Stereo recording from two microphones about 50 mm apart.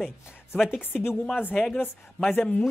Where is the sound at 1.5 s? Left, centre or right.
Centre.